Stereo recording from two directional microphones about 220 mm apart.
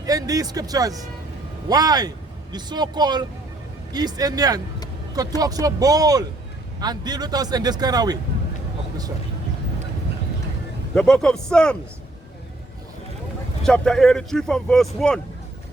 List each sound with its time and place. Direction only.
0.0 s speech: 15° right (ahead or behind)
10.9 s speech: 5° left (ahead or behind)
13.7 s speech: 5° left (ahead or behind)